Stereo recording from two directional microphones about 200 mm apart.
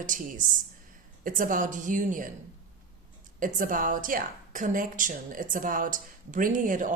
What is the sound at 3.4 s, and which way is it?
A woman's voice, 40° right (ahead or behind).